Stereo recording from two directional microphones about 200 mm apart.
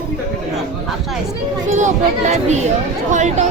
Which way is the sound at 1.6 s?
35° right (ahead or behind).